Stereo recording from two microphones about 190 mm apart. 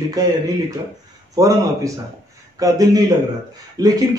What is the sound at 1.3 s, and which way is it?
A man's voice, 20° right (ahead or behind).